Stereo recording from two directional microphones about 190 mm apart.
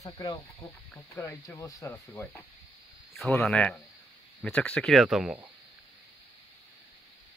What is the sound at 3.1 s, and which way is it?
Speech, centre (ahead or behind).